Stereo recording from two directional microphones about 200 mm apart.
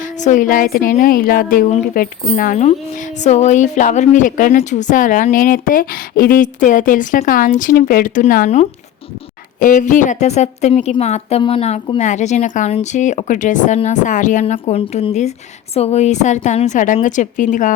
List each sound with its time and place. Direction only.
0.0 s a woman's voice: 40° left (ahead or behind)